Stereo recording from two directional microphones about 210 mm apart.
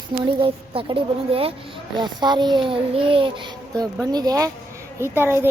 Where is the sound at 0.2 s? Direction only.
25° right (ahead or behind).